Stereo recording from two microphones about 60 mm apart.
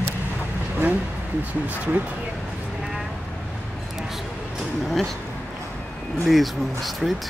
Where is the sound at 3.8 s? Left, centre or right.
Centre.